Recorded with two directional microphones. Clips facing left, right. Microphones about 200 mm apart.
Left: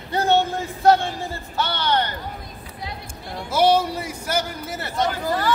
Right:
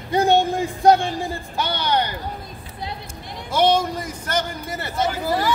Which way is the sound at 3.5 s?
5° left (ahead or behind).